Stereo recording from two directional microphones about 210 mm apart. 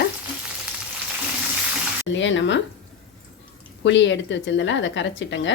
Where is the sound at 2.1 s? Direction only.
60° left (ahead or behind).